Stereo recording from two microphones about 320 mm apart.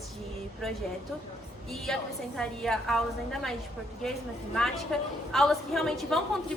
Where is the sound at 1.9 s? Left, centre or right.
Centre.